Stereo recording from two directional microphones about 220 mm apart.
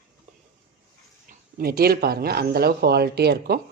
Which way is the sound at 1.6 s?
45° right (ahead or behind).